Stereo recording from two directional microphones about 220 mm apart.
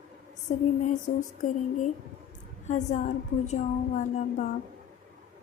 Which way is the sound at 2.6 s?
30° left (ahead or behind).